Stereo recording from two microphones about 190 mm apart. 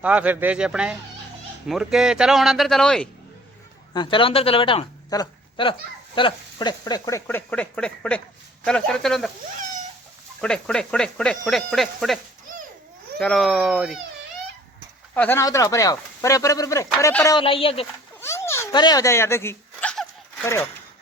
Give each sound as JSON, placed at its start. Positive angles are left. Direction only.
{"t": 0.0, "sound": "speech", "side_deg": -5}
{"t": 3.9, "sound": "speech", "side_deg": 25}
{"t": 10.4, "sound": "speech", "side_deg": 5}
{"t": 15.1, "sound": "speech", "side_deg": 10}
{"t": 17.3, "sound": "speech", "side_deg": 30}
{"t": 18.2, "sound": "a sound", "side_deg": 15}